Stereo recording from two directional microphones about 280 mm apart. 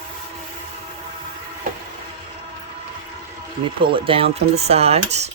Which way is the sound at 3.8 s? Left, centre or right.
Centre.